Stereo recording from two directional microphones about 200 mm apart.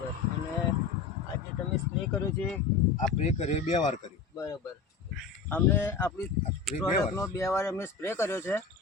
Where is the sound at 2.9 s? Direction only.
35° left (ahead or behind).